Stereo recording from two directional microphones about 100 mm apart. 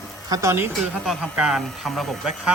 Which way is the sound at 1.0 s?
5° right (ahead or behind).